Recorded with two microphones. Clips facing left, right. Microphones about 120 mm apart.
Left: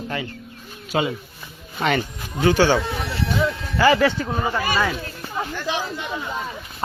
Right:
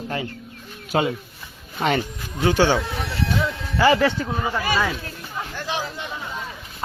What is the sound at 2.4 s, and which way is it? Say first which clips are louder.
Speech: left 1 dB; 20° right (ahead or behind).